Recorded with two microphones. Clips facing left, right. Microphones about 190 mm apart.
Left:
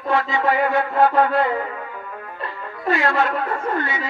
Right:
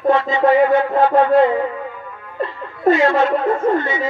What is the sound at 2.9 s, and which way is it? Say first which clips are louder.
Speech: right 4 dB; 20° right (ahead or behind).